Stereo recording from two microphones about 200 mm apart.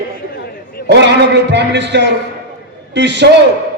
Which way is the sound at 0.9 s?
60° right (ahead or behind).